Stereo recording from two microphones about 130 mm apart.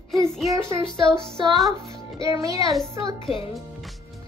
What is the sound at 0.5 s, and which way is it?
Speech, 20° right (ahead or behind).